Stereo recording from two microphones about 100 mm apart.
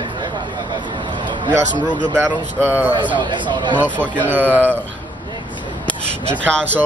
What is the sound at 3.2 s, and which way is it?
Speech, 50° right (ahead or behind).